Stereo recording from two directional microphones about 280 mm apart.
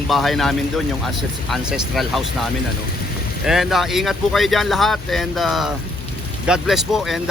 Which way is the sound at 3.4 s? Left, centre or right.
Centre.